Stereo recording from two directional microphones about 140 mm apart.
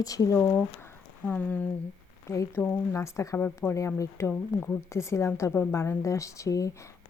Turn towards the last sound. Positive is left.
turn(degrees=25)  # may be behind; listen again after turning